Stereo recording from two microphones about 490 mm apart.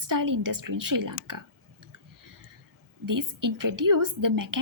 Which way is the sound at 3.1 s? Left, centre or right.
Right.